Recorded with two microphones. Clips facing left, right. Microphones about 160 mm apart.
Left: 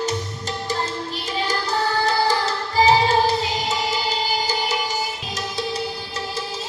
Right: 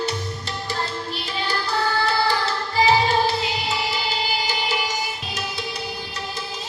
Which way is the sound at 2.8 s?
40° left (ahead or behind).